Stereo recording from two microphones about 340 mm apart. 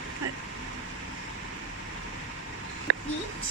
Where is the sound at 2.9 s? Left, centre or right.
Right.